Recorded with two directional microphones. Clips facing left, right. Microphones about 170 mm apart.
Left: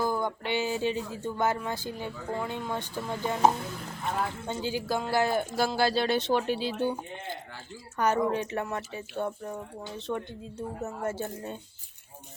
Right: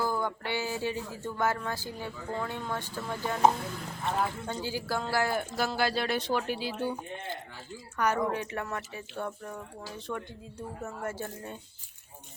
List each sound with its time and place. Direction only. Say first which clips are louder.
0.0 s speech: left 2 dB; 20° left (ahead or behind)
4.4 s speech: left 3 dB; 20° left (ahead or behind)